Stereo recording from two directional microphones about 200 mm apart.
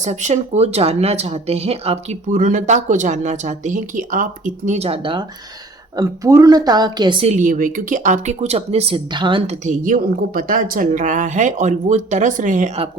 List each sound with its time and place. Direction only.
0.0 s a woman's voice: 35° right (ahead or behind)